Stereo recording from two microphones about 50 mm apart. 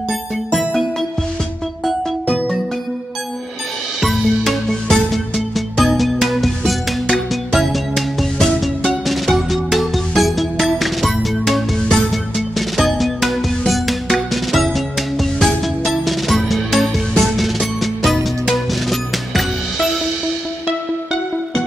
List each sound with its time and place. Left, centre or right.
2.2 s music: centre
4.0 s music: centre